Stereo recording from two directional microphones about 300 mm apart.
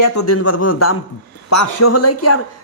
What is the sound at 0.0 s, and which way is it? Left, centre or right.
Speech, left.